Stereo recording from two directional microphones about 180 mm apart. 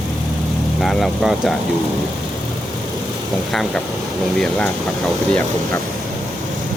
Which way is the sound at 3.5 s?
5° left (ahead or behind).